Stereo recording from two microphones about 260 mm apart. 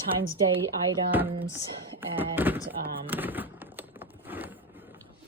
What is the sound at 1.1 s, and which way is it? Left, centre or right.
Speech, centre.